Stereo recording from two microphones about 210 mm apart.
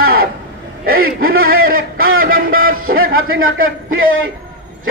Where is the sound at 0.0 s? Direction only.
45° right (ahead or behind).